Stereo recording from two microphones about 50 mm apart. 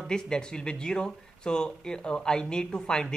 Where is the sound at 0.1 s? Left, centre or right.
Centre.